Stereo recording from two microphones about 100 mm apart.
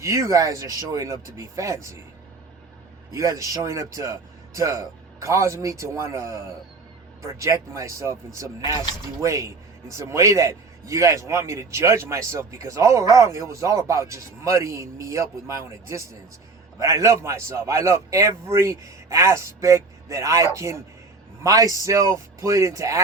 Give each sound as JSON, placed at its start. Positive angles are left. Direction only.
{"t": 0.0, "sound": "a man's voice", "side_deg": -30}
{"t": 3.1, "sound": "a man's voice", "side_deg": -30}